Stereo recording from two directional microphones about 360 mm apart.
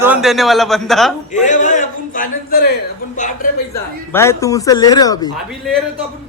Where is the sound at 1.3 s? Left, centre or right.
Centre.